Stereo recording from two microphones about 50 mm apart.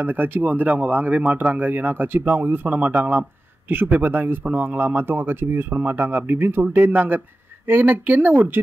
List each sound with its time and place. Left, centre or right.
0.0 s speech: right